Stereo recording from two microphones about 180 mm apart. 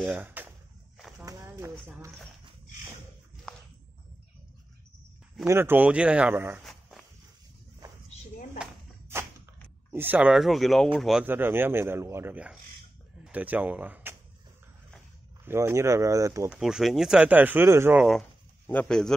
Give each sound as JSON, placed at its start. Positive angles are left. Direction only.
{"t": 0.0, "sound": "speech", "side_deg": -10}
{"t": 1.2, "sound": "a sound", "side_deg": -15}
{"t": 3.5, "sound": "a sound", "side_deg": 5}
{"t": 5.5, "sound": "speech", "side_deg": -10}
{"t": 6.6, "sound": "walk", "side_deg": 0}
{"t": 9.9, "sound": "speech", "side_deg": -10}
{"t": 15.4, "sound": "speech", "side_deg": -15}
{"t": 16.4, "sound": "speech", "side_deg": -5}
{"t": 18.7, "sound": "speech", "side_deg": 5}